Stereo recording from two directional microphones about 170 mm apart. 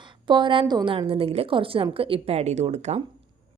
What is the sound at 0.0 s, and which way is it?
A woman's voice, 25° right (ahead or behind).